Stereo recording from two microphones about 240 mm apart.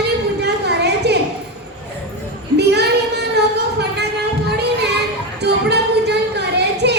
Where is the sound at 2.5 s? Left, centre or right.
Right.